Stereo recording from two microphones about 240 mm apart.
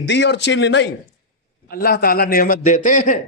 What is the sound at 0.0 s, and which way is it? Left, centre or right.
A man's voice, left.